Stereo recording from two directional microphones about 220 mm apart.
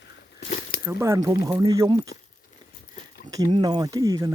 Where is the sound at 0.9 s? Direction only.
10° right (ahead or behind).